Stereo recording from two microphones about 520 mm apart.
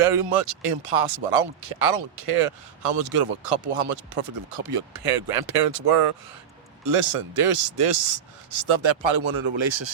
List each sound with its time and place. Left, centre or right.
0.0 s speech: right